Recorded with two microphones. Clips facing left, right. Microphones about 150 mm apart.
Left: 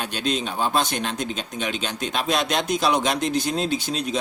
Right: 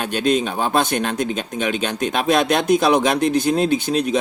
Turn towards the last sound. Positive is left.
turn(degrees=-55)  # may be behind; listen again after turning